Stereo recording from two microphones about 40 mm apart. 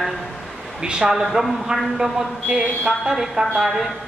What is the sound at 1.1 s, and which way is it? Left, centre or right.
Speech, centre.